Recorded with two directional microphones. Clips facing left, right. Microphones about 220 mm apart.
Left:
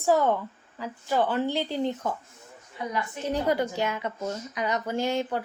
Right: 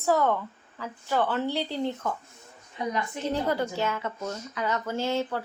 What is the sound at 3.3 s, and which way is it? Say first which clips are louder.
Speech: left 2 dB; 15° left (ahead or behind).